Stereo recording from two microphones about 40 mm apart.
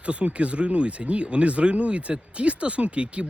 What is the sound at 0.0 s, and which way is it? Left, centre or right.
Speech, right.